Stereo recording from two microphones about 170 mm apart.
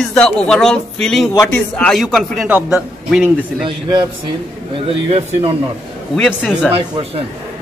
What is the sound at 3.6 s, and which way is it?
A man's voice, 30° right (ahead or behind).